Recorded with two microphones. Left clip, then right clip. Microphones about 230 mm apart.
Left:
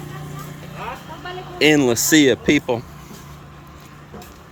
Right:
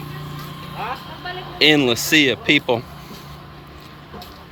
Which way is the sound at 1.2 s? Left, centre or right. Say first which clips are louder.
Right 1 dB; centre.